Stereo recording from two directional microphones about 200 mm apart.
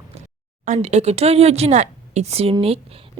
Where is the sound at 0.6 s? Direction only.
35° right (ahead or behind).